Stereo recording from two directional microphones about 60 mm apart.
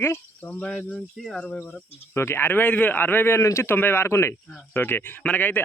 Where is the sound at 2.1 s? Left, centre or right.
Left.